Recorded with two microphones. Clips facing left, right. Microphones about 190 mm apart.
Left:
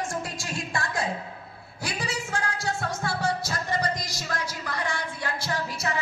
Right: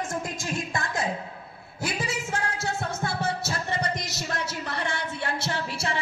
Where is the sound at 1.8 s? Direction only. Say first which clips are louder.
Right 2 dB; 25° right (ahead or behind).